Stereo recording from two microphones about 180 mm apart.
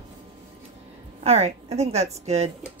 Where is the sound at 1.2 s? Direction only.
35° right (ahead or behind).